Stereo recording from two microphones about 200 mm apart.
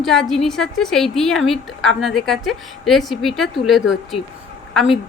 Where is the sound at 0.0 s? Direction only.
Centre (ahead or behind).